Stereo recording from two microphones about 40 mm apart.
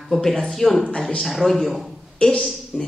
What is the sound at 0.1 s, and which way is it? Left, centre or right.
Speech, centre.